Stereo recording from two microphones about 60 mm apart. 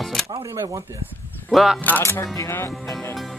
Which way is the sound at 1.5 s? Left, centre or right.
Centre.